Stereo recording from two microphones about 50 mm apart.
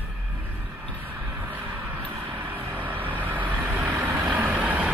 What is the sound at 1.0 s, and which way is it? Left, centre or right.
Vehicle, right.